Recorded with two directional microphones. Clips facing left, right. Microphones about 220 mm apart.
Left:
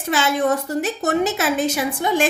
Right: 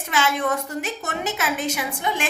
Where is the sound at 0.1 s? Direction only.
35° left (ahead or behind).